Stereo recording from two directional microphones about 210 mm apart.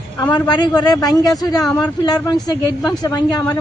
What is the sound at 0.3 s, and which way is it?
A man's voice, 20° left (ahead or behind).